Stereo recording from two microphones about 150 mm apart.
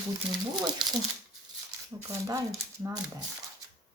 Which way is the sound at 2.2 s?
20° right (ahead or behind).